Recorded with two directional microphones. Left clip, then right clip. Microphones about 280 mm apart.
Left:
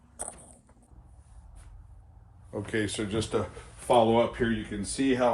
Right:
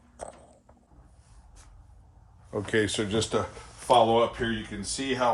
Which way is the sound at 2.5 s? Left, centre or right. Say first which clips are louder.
Right 5 dB; right.